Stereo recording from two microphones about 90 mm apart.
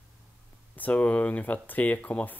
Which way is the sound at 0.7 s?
15° left (ahead or behind).